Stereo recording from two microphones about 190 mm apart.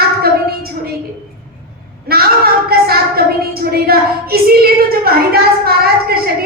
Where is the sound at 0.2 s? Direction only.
55° right (ahead or behind).